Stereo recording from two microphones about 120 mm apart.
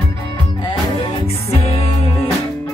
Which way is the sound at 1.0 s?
55° left (ahead or behind).